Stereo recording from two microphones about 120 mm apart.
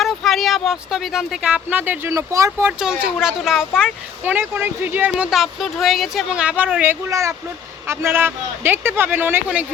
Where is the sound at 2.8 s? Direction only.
5° right (ahead or behind).